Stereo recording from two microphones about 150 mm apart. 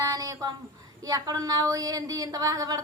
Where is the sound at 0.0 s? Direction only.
25° right (ahead or behind).